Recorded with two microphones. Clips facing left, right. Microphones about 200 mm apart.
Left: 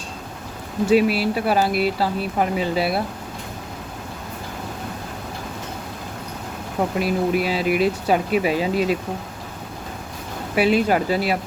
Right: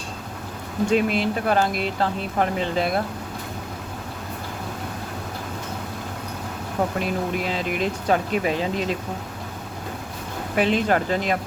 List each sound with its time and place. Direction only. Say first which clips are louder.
0.9 s speech: left 4 dB; 5° left (ahead or behind)
7.0 s speech: left 5 dB; 10° left (ahead or behind)
10.5 s speech: left 3 dB; 10° left (ahead or behind)